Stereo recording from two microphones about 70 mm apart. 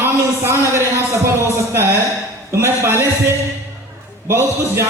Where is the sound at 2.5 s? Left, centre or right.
Right.